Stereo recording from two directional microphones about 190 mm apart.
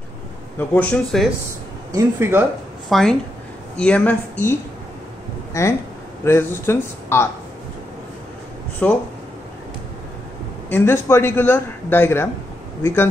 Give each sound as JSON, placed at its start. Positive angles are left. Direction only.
{"t": 0.6, "sound": "speech", "side_deg": 10}
{"t": 1.9, "sound": "speech", "side_deg": -15}
{"t": 2.9, "sound": "a woman's voice", "side_deg": 0}
{"t": 8.8, "sound": "speech", "side_deg": 5}
{"t": 10.7, "sound": "speech", "side_deg": 10}